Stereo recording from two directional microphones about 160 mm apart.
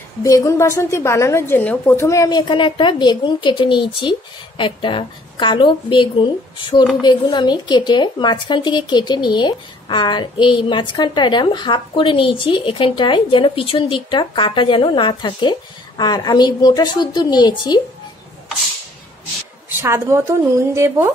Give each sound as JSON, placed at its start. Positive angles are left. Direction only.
{"t": 0.2, "sound": "a woman's voice", "side_deg": 20}
{"t": 19.8, "sound": "speech", "side_deg": -15}